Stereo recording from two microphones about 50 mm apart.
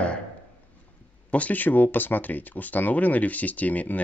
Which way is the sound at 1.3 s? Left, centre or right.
Left.